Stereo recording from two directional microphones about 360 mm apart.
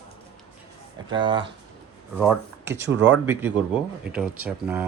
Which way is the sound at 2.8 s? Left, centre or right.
Right.